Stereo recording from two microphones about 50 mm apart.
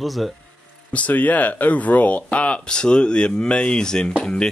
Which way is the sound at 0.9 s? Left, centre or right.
Left.